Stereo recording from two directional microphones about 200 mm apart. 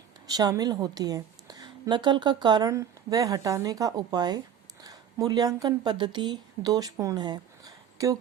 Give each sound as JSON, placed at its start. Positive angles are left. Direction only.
{"t": 0.3, "sound": "a woman's voice", "side_deg": -20}